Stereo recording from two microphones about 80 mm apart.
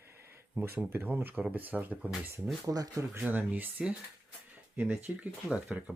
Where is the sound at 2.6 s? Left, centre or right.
Right.